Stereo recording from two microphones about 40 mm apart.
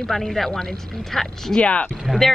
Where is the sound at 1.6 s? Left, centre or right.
Left.